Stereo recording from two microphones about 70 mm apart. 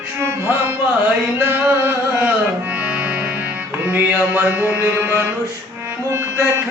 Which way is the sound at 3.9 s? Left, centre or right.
Right.